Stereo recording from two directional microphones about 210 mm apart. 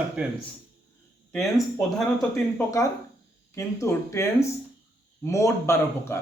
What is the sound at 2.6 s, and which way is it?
A man's voice, 15° left (ahead or behind).